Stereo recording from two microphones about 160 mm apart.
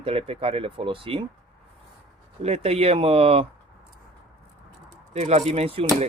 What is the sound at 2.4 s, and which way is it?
Speech, 40° right (ahead or behind).